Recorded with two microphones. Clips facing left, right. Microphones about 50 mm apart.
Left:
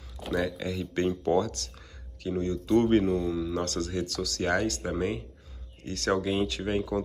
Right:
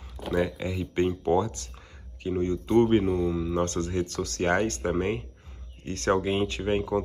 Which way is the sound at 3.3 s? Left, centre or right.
Right.